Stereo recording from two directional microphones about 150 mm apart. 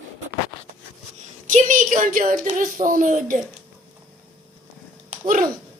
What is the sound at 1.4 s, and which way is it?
Speech, 60° right (ahead or behind).